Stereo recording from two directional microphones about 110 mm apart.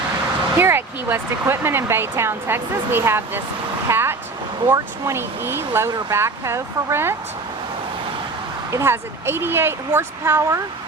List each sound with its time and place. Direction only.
0.6 s speech: 20° right (ahead or behind)
8.7 s speech: 25° right (ahead or behind)